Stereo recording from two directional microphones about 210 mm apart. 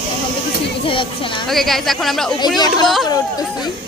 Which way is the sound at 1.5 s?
Centre (ahead or behind).